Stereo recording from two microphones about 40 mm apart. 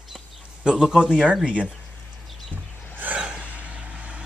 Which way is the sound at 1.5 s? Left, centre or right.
Right.